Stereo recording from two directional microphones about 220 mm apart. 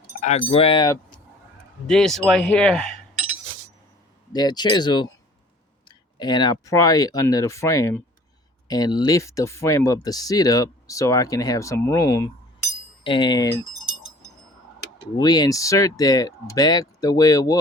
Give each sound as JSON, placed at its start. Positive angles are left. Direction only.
{"t": 0.2, "sound": "speech", "side_deg": 30}
{"t": 1.9, "sound": "speech", "side_deg": 0}
{"t": 4.3, "sound": "speech", "side_deg": 20}
{"t": 15.2, "sound": "speech", "side_deg": 15}